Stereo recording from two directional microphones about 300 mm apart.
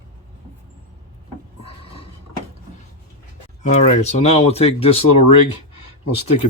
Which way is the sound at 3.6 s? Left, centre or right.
Left.